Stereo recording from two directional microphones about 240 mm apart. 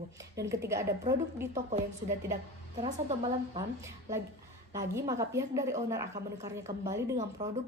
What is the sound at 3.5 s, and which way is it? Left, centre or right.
A woman's voice, centre.